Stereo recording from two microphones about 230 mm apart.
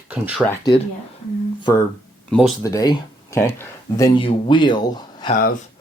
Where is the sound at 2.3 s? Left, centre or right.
Centre.